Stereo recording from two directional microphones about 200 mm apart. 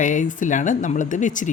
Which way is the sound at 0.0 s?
40° left (ahead or behind).